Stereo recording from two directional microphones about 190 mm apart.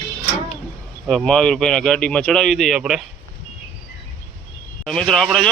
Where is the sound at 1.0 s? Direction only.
Centre (ahead or behind).